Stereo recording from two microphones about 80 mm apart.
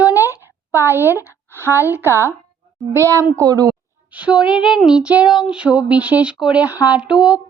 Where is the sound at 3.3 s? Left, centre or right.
Right.